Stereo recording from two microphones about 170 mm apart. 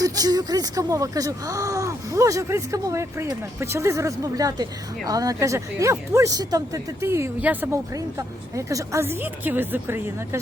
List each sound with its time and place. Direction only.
0.0 s a woman's voice: 25° right (ahead or behind)